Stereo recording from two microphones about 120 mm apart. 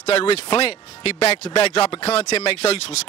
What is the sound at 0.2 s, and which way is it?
Speech, 50° left (ahead or behind).